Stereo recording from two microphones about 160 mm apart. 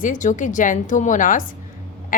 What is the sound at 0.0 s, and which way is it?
A woman's voice, 55° left (ahead or behind).